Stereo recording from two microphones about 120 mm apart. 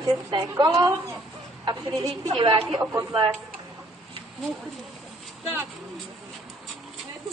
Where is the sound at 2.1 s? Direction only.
45° right (ahead or behind).